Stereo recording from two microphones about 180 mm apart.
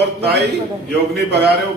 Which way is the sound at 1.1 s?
65° right (ahead or behind).